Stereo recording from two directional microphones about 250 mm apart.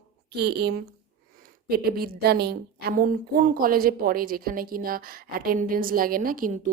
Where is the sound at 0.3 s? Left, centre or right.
Right.